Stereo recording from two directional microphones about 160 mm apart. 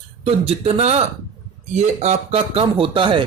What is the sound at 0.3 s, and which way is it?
Speech, 35° right (ahead or behind).